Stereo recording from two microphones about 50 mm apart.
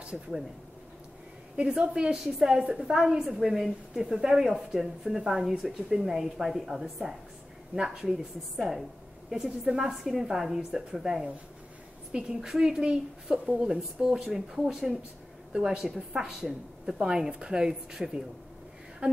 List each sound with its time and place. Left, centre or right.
0.0 s speech: centre
1.6 s a woman's voice: right
12.4 s a woman's voice: centre
13.7 s a woman's voice: centre
16.3 s a woman's voice: centre
17.0 s a woman's voice: centre